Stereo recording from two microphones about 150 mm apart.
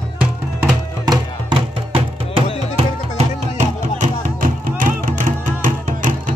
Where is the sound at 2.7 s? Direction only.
50° right (ahead or behind).